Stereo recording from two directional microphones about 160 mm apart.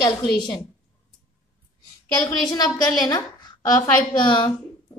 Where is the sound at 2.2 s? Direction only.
25° left (ahead or behind).